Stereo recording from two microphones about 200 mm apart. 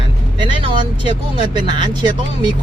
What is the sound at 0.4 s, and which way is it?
Speech, 25° right (ahead or behind).